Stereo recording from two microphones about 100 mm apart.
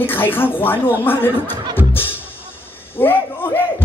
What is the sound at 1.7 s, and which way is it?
Music, 20° left (ahead or behind).